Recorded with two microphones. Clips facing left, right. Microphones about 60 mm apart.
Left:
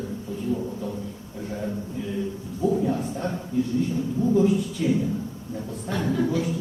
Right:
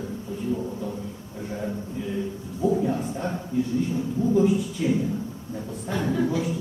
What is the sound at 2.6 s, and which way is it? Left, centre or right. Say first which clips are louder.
Speech: even; centre.